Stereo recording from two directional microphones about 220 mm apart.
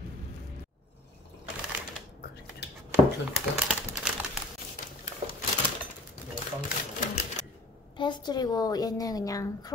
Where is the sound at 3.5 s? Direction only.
5° right (ahead or behind).